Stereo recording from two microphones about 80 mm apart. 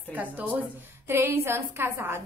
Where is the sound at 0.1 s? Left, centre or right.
Right.